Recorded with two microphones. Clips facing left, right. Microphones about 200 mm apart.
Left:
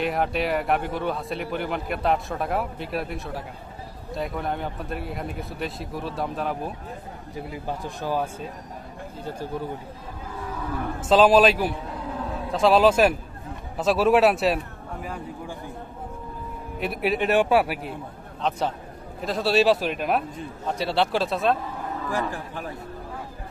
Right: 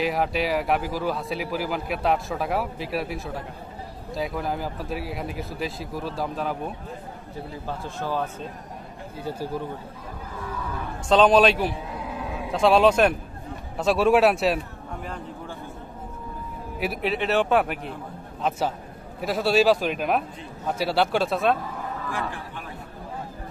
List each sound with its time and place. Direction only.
0.0 s speech: centre (ahead or behind)
7.5 s speech: 15° left (ahead or behind)
9.2 s speech: 10° right (ahead or behind)
11.1 s speech: 5° left (ahead or behind)
17.0 s speech: 15° left (ahead or behind)
19.2 s speech: centre (ahead or behind)
22.1 s a man's voice: 40° left (ahead or behind)